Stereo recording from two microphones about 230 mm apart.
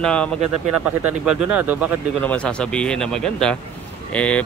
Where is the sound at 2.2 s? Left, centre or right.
Centre.